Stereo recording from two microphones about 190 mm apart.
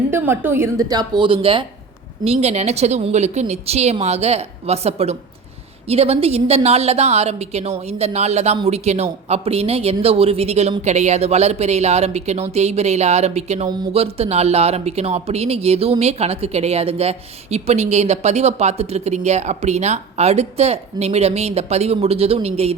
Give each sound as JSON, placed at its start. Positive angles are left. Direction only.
{"t": 0.1, "sound": "a woman's voice", "side_deg": -10}